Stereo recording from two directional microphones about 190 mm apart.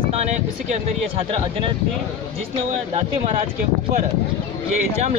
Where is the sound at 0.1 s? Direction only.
35° right (ahead or behind).